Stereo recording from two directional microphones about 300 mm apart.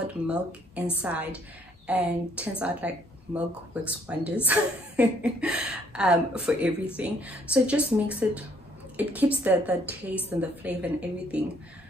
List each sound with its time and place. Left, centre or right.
0.0 s a woman's voice: centre